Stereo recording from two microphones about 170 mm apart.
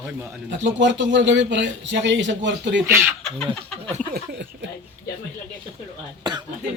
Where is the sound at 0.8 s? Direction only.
90° right.